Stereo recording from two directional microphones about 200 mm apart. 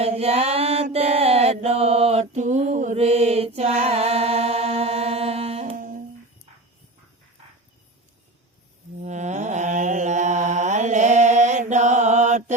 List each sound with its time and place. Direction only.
0.0 s mantra: 30° right (ahead or behind)
9.0 s mantra: 35° right (ahead or behind)